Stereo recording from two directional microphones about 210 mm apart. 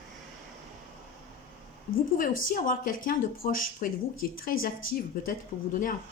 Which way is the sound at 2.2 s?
40° left (ahead or behind).